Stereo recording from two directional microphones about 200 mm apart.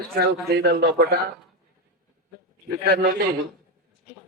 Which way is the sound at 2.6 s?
55° right (ahead or behind).